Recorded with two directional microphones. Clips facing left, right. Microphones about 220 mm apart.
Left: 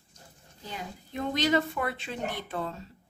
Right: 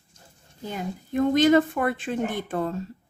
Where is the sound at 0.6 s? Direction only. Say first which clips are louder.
Right 8 dB; 50° right (ahead or behind).